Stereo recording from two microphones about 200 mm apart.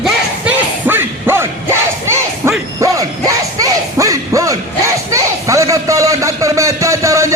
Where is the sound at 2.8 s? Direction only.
15° right (ahead or behind).